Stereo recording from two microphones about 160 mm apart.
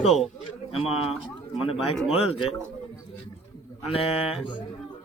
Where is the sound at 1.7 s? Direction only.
Centre (ahead or behind).